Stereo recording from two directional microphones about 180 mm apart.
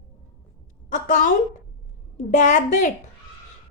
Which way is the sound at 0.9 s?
45° left (ahead or behind).